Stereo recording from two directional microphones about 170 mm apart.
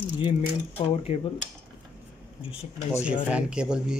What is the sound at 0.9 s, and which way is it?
Speech, 35° left (ahead or behind).